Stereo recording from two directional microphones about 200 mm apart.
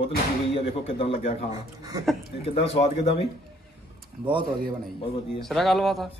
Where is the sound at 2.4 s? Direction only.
30° left (ahead or behind).